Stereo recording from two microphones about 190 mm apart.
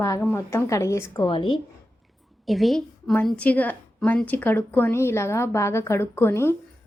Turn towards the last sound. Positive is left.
turn(degrees=15)  # may be behind; listen again after turning